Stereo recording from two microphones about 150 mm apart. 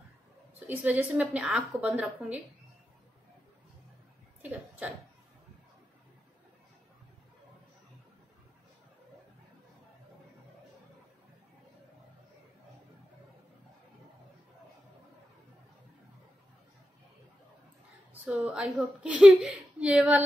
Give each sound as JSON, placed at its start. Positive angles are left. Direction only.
{"t": 0.7, "sound": "a woman's voice", "side_deg": -10}
{"t": 4.4, "sound": "speech", "side_deg": -10}
{"t": 18.2, "sound": "a woman's voice", "side_deg": -10}